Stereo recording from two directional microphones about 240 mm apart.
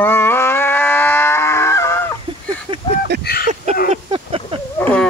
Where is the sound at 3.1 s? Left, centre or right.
Right.